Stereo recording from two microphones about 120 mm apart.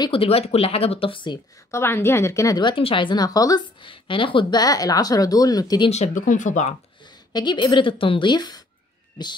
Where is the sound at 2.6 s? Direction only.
50° left (ahead or behind).